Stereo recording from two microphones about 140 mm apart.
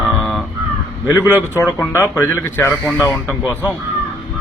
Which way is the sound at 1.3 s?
20° left (ahead or behind).